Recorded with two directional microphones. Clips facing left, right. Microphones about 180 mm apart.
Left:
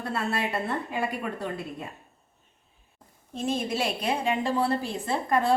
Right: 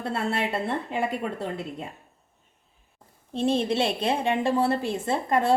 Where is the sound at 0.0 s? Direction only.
25° right (ahead or behind).